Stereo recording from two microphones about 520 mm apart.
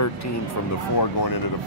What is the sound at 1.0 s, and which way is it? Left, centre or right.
Speech, left.